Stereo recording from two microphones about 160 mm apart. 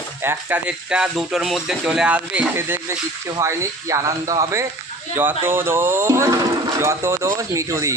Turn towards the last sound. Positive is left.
turn(degrees=-20)  # may be behind; listen again after turning